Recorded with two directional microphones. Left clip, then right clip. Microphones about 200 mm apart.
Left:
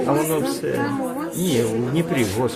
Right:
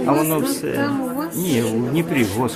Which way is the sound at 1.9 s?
25° right (ahead or behind).